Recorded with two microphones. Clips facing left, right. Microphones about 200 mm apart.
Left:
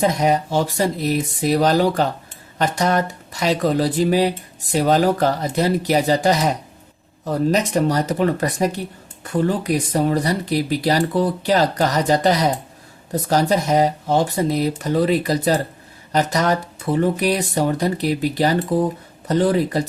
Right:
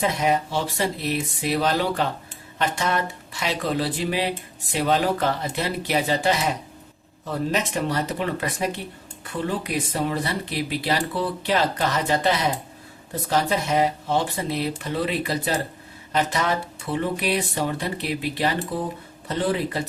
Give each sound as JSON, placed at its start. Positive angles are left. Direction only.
{"t": 0.0, "sound": "speech", "side_deg": 40}